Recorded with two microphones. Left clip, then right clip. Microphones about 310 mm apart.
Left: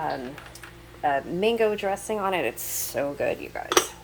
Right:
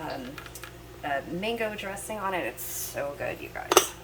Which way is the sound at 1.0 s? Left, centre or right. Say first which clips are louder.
Left 7 dB; left.